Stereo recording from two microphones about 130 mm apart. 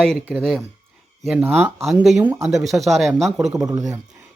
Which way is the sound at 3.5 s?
25° right (ahead or behind).